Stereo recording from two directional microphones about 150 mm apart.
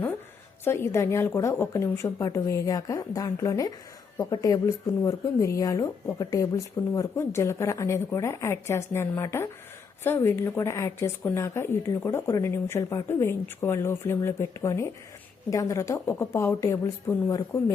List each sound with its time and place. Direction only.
0.6 s a woman's voice: 15° left (ahead or behind)